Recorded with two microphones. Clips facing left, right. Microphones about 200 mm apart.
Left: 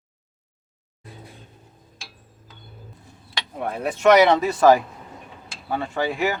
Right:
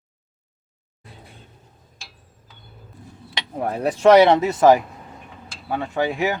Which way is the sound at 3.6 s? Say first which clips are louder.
Right 3 dB; 35° right (ahead or behind).